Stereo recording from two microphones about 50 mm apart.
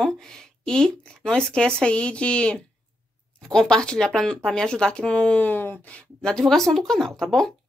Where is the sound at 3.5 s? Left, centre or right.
Centre; by 5.5 s left.